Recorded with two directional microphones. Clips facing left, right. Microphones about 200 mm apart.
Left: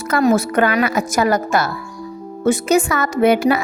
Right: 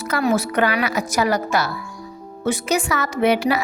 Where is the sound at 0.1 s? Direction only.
45° left (ahead or behind).